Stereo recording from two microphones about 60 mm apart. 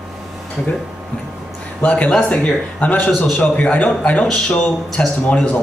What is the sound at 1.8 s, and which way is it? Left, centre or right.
Speech, left.